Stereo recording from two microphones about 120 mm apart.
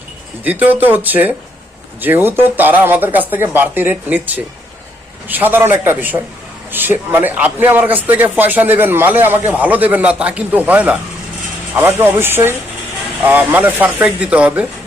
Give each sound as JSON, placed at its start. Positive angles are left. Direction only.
{"t": 0.4, "sound": "a man's voice", "side_deg": -15}